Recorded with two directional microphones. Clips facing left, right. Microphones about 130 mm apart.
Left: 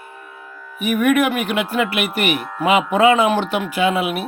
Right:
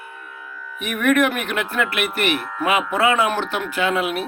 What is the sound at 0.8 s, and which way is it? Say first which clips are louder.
Speech: left 2 dB; 5° left (ahead or behind).